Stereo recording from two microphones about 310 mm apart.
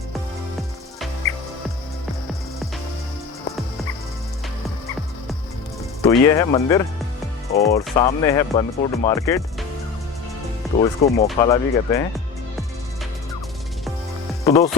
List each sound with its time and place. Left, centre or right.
6.0 s speech: centre
10.8 s speech: left
14.4 s speech: centre